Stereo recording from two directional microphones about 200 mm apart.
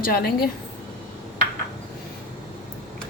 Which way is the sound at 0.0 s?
50° left (ahead or behind).